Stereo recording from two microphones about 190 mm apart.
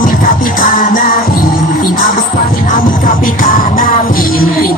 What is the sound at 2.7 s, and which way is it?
Music, 45° left (ahead or behind).